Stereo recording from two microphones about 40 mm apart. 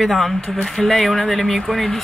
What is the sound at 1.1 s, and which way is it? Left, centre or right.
Speech, left.